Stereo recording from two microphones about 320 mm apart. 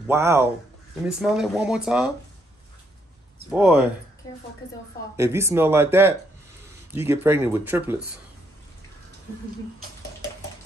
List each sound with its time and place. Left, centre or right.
0.0 s speech: centre
3.4 s speech: centre
5.1 s speech: centre